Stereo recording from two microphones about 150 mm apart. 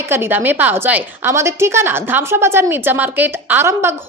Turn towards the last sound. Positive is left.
turn(degrees=-15)  # may be behind; listen again after turning